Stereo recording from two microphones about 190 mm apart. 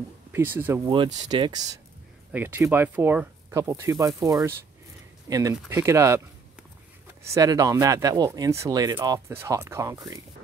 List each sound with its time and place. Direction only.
0.3 s speech: 10° right (ahead or behind)
0.8 s speech: 25° right (ahead or behind)
2.3 s speech: 10° right (ahead or behind)
7.2 s speech: 15° right (ahead or behind)